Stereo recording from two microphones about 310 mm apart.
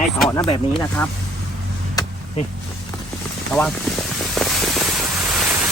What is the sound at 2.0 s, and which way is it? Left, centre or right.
Vehicle, centre.